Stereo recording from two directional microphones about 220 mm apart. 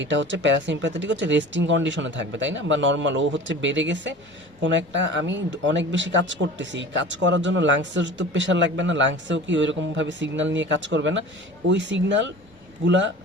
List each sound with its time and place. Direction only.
0.0 s speech: 55° right (ahead or behind)